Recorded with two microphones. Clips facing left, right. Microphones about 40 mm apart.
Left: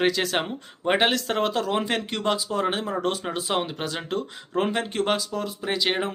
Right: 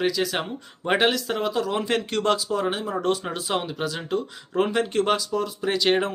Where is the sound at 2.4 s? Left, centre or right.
Left.